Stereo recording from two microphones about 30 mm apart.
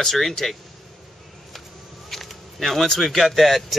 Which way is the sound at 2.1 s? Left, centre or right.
Centre.